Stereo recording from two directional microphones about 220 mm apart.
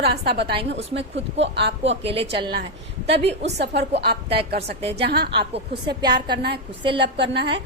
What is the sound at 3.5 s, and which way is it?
Speech, 50° right (ahead or behind).